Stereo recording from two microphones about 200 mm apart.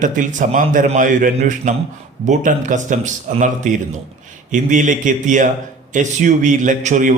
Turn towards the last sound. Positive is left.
turn(degrees=-40)  # may be behind; listen again after turning